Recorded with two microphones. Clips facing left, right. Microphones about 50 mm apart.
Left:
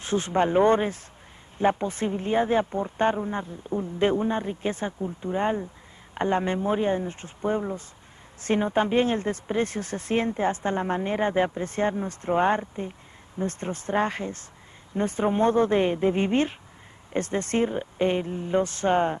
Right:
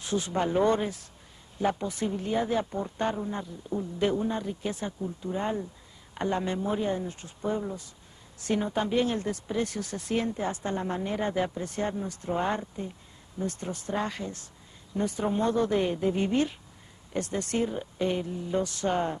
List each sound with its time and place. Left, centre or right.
0.0 s speech: left